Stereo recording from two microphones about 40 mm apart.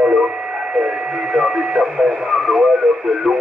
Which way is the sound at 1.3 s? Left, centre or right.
Centre.